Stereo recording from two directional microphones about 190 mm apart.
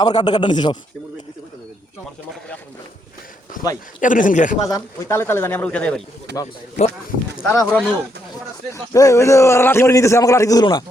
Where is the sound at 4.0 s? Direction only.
45° left (ahead or behind).